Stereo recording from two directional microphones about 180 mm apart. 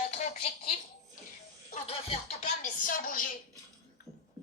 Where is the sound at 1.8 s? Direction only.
35° left (ahead or behind); by 3.3 s 50° left (ahead or behind).